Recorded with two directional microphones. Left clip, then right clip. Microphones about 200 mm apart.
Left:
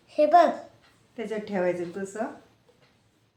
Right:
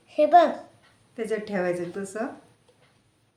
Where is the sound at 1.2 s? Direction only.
25° right (ahead or behind).